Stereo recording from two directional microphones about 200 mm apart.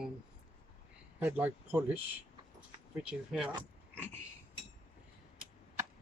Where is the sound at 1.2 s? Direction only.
10° right (ahead or behind).